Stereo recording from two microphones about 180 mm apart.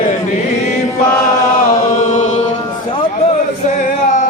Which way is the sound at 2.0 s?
40° left (ahead or behind).